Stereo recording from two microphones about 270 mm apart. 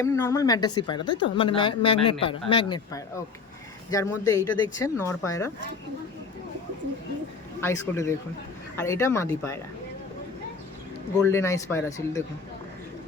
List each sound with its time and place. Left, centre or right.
0.0 s a woman's voice: centre
7.6 s a woman's voice: centre
11.2 s a woman's voice: centre